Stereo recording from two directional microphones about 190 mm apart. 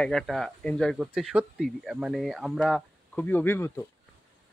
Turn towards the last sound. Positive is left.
turn(degrees=10)  # may be behind; listen again after turning